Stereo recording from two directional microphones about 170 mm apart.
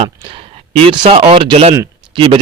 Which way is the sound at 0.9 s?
30° right (ahead or behind).